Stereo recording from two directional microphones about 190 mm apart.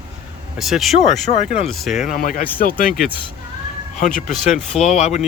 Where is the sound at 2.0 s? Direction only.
45° left (ahead or behind).